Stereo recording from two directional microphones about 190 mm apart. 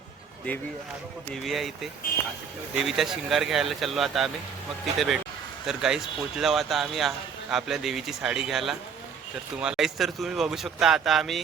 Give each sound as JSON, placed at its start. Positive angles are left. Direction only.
{"t": 1.3, "sound": "speech", "side_deg": 0}